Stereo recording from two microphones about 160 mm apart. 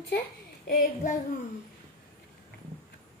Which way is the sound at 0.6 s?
60° left (ahead or behind).